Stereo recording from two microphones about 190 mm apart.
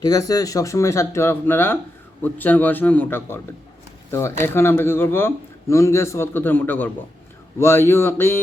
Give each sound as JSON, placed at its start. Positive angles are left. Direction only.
{"t": 0.0, "sound": "speech", "side_deg": 20}